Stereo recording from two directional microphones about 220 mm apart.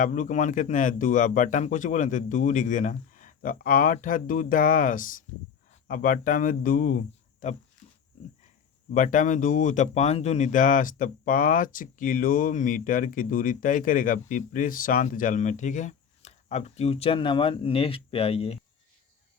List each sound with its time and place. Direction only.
0.0 s speech: 35° left (ahead or behind)
8.9 s speech: 35° left (ahead or behind)